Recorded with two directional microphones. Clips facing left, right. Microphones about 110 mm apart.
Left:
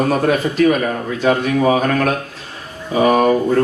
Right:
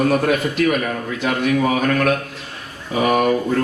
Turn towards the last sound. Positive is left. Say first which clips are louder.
# left 4 dB
turn(degrees=35)  # may be behind; listen again after turning